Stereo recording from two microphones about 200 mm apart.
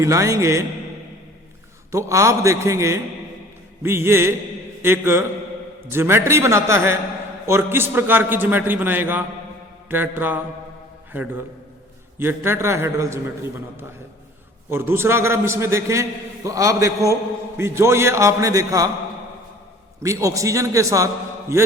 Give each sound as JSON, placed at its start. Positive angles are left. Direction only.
{"t": 0.0, "sound": "a man's voice", "side_deg": -15}
{"t": 1.9, "sound": "a man's voice", "side_deg": -15}
{"t": 20.0, "sound": "a man's voice", "side_deg": -15}